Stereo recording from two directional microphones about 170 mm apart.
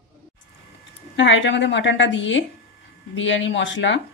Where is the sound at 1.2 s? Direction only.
90° left.